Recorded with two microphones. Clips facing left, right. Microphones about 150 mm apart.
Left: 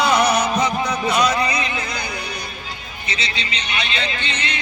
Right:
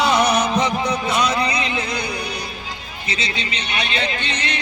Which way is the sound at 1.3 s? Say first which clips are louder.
Even; 25° right (ahead or behind).